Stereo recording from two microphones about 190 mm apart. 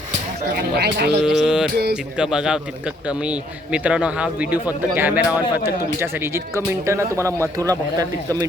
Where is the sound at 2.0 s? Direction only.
5° right (ahead or behind).